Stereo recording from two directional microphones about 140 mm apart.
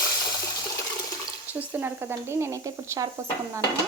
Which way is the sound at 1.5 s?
15° right (ahead or behind).